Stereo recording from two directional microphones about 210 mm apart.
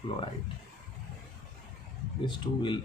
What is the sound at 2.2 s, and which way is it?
Speech, 20° left (ahead or behind).